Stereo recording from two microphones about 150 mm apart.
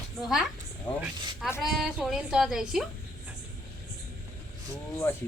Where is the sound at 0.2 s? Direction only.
Centre (ahead or behind).